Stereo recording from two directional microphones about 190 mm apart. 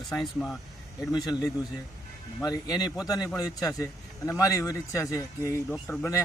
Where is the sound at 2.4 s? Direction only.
20° left (ahead or behind).